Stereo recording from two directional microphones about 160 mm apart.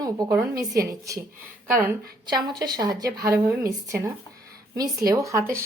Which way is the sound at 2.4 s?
25° right (ahead or behind).